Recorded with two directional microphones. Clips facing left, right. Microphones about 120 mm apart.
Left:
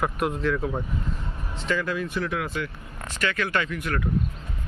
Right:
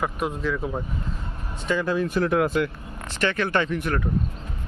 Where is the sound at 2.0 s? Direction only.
45° right (ahead or behind).